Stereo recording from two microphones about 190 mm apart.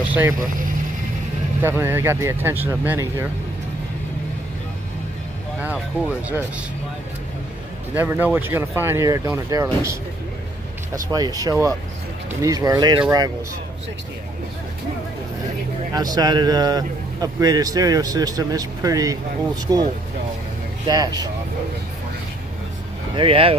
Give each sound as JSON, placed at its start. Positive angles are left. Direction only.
{"t": 0.0, "sound": "vehicle", "side_deg": -10}
{"t": 1.6, "sound": "speech", "side_deg": -10}
{"t": 5.6, "sound": "speech", "side_deg": -5}
{"t": 7.9, "sound": "speech", "side_deg": -10}
{"t": 11.1, "sound": "speech", "side_deg": -20}
{"t": 15.9, "sound": "speech", "side_deg": -20}
{"t": 23.1, "sound": "speech", "side_deg": -30}